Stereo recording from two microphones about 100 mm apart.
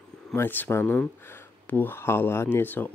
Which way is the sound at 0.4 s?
20° left (ahead or behind).